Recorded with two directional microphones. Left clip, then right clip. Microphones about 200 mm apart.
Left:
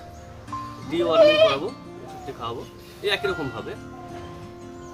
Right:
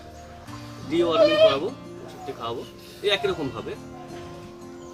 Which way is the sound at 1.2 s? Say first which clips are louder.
Left 2 dB; 35° left (ahead or behind).